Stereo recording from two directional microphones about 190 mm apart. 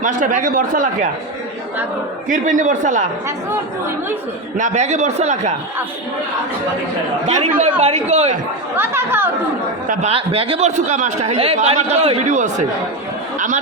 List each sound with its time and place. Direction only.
0.0 s speech: 45° right (ahead or behind)
2.3 s a man's voice: 45° right (ahead or behind)
4.5 s a man's voice: 40° right (ahead or behind)
7.3 s a man's voice: 40° right (ahead or behind)
8.7 s speech: 10° right (ahead or behind)
9.8 s speech: 45° right (ahead or behind)
10.1 s a man's voice: 30° right (ahead or behind)